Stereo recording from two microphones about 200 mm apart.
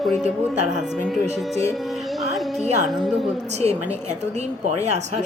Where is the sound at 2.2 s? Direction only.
Centre (ahead or behind).